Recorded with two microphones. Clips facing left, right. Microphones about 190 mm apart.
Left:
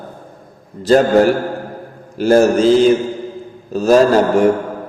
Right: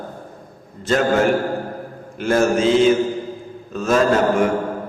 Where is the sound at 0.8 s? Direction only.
35° left (ahead or behind).